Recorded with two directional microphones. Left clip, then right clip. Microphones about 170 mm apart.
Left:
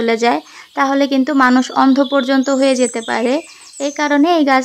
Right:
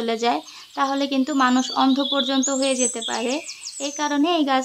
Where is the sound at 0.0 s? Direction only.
30° left (ahead or behind).